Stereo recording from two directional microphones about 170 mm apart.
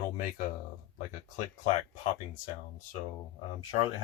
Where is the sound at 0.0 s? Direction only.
55° left (ahead or behind).